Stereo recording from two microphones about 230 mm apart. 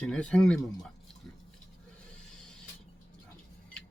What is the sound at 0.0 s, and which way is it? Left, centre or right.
Speech, centre.